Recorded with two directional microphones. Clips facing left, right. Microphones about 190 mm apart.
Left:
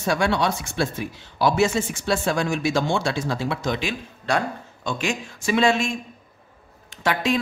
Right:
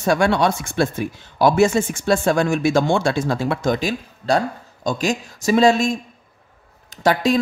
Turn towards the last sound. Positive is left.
turn(degrees=-40)  # may be behind; listen again after turning